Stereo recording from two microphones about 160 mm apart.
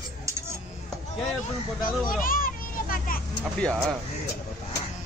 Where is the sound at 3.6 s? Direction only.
5° left (ahead or behind).